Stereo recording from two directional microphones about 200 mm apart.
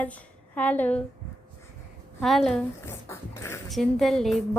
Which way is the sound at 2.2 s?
Centre (ahead or behind).